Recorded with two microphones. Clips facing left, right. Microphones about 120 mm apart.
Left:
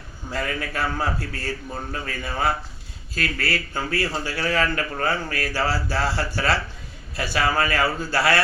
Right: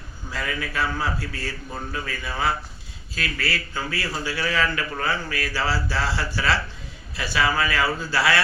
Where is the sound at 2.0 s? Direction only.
45° left (ahead or behind).